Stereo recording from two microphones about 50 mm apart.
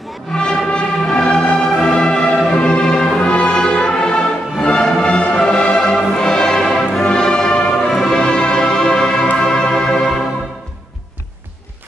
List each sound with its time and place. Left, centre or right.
0.4 s music: centre